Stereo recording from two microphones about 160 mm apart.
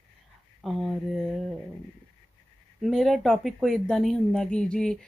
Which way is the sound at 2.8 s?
Centre (ahead or behind).